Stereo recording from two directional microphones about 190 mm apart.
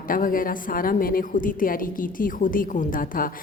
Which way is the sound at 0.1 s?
45° left (ahead or behind).